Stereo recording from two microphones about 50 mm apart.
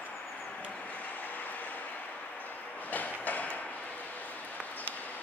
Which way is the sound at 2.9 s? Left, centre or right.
Left.